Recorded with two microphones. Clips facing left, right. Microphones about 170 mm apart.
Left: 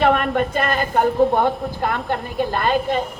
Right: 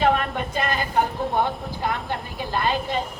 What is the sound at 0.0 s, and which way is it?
Speech, 55° left (ahead or behind).